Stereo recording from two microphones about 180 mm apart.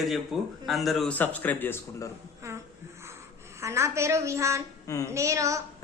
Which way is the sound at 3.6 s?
15° right (ahead or behind).